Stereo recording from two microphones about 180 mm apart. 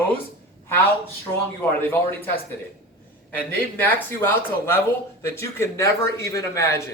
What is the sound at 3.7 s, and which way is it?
A man's voice, 10° left (ahead or behind).